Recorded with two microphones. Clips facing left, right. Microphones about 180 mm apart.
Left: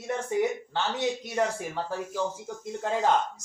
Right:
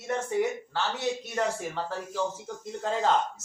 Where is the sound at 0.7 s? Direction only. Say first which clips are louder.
Left 1 dB; 20° left (ahead or behind).